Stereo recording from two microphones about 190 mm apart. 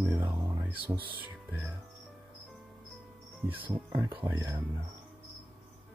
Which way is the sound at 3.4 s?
10° right (ahead or behind).